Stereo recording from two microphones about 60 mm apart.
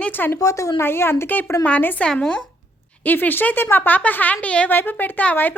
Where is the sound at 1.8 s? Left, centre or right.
Left.